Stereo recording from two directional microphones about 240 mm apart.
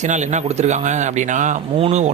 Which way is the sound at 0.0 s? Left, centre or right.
Right.